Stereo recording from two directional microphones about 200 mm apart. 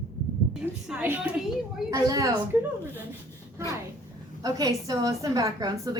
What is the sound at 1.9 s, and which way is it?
Speech, 15° right (ahead or behind).